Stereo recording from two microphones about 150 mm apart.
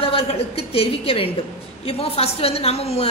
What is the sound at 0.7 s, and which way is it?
A woman's voice, 40° left (ahead or behind).